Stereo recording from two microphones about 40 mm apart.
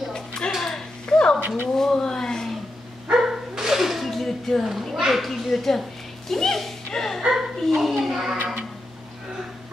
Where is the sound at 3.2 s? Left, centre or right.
Centre.